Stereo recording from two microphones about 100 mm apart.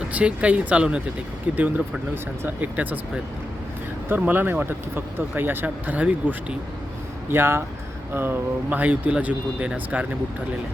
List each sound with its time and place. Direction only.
0.1 s speech: 15° right (ahead or behind)
4.1 s speech: 20° right (ahead or behind)